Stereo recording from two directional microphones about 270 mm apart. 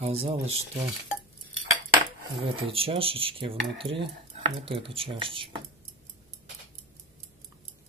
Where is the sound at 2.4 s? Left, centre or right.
Right.